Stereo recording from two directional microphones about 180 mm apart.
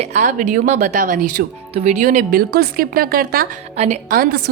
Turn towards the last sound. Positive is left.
turn(degrees=-55)  # may be behind; listen again after turning